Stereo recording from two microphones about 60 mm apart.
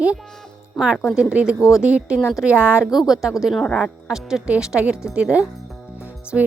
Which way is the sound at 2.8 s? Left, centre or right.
Centre.